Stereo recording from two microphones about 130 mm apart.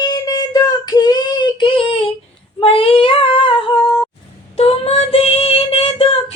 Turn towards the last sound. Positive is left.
turn(degrees=50)  # may be behind; listen again after turning